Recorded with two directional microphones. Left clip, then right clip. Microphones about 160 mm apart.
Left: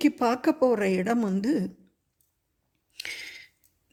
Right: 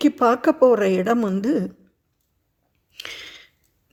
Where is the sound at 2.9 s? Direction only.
5° left (ahead or behind).